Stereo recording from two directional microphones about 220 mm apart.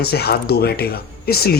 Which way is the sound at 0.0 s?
45° left (ahead or behind).